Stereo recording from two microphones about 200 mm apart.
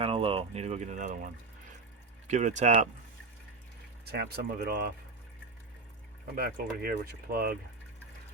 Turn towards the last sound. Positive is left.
turn(degrees=-45)  # may be behind; listen again after turning